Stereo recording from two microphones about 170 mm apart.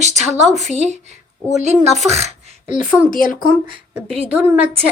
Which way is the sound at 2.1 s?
40° right (ahead or behind).